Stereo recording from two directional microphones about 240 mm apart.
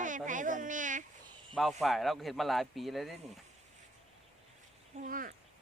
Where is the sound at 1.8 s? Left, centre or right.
Centre.